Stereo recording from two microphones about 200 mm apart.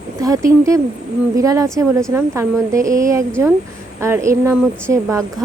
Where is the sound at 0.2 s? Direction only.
15° right (ahead or behind).